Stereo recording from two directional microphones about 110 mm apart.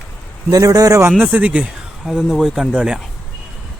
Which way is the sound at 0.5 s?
35° right (ahead or behind).